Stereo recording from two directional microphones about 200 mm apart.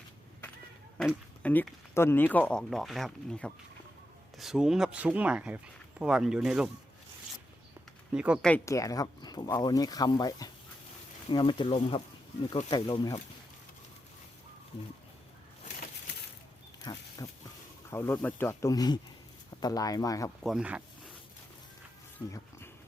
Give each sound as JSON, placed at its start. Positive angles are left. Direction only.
{"t": 0.9, "sound": "speech", "side_deg": 5}
{"t": 8.1, "sound": "speech", "side_deg": -5}
{"t": 8.4, "sound": "speech", "side_deg": 10}
{"t": 16.8, "sound": "dog", "side_deg": 20}
{"t": 17.9, "sound": "speech", "side_deg": 10}
{"t": 20.4, "sound": "speech", "side_deg": -5}